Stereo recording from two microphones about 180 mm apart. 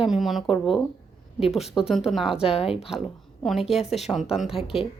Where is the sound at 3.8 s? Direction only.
35° left (ahead or behind).